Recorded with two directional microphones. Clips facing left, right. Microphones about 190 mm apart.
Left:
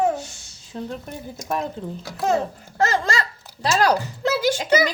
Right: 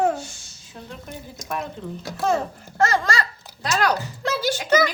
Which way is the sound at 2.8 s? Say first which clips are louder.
Even; 20° left (ahead or behind).